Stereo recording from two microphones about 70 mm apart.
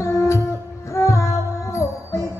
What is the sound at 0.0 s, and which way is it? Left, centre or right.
Music, left.